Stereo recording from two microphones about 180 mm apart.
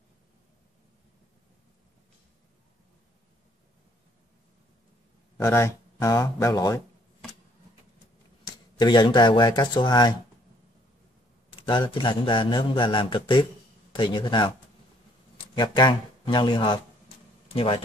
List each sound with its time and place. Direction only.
5.4 s speech: 15° left (ahead or behind)
8.5 s speech: 25° left (ahead or behind)
11.5 s a man's voice: 25° left (ahead or behind)